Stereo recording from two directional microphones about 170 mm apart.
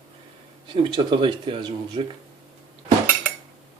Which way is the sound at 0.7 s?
25° right (ahead or behind).